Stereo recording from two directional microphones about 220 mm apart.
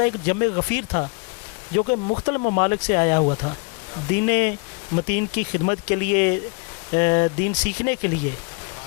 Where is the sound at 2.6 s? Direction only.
15° left (ahead or behind).